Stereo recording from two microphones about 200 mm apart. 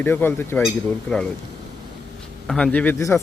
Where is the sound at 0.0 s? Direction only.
10° left (ahead or behind).